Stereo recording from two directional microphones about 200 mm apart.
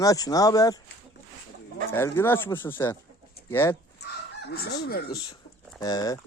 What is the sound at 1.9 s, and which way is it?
Speech, 10° left (ahead or behind).